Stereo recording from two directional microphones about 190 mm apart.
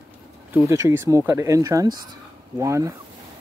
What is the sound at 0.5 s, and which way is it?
Speech, 15° right (ahead or behind).